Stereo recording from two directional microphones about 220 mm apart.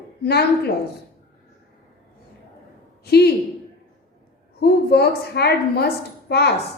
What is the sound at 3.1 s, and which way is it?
Speech, 45° left (ahead or behind).